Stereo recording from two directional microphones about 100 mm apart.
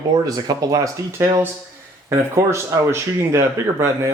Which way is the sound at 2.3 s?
25° right (ahead or behind).